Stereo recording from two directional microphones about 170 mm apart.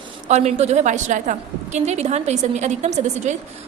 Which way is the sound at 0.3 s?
40° right (ahead or behind).